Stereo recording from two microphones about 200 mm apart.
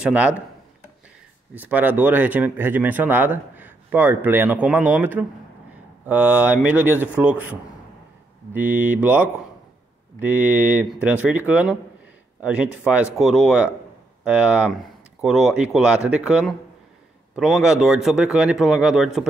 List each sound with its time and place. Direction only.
0.0 s speech: 5° right (ahead or behind)
1.5 s speech: 10° right (ahead or behind)
8.5 s a man's voice: 10° right (ahead or behind)